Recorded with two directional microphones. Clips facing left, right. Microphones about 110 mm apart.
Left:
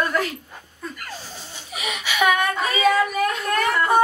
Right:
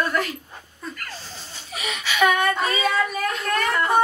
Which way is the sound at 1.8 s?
15° left (ahead or behind).